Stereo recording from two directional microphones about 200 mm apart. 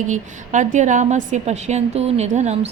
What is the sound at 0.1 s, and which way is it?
A woman's voice, 40° right (ahead or behind).